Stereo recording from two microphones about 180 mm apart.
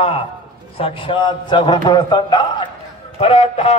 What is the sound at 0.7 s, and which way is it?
A man's voice, 30° left (ahead or behind).